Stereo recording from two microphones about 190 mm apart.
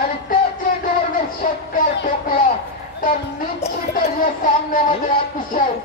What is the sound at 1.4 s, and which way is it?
Music, 40° left (ahead or behind).